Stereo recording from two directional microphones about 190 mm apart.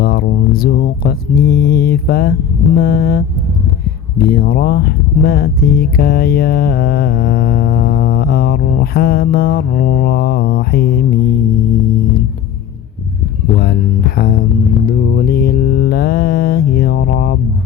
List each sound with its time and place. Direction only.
0.0 s mantra: 55° left (ahead or behind)
2.7 s speech: 50° left (ahead or behind)
14.2 s speech: 50° left (ahead or behind)